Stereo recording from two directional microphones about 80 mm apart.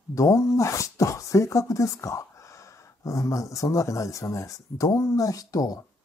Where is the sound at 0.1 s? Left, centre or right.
Left.